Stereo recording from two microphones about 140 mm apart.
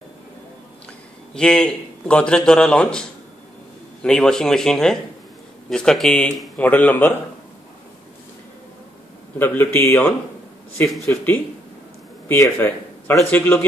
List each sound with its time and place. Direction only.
1.3 s a man's voice: 5° left (ahead or behind)
9.4 s a man's voice: 15° left (ahead or behind)
10.9 s a man's voice: centre (ahead or behind)
12.3 s a man's voice: 15° left (ahead or behind)